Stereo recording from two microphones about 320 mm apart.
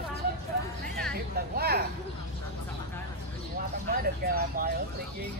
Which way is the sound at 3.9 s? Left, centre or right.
Right.